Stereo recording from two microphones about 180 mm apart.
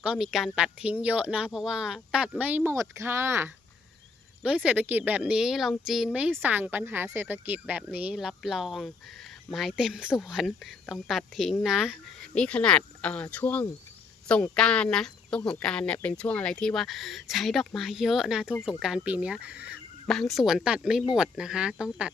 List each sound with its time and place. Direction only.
0.0 s speech: 5° right (ahead or behind)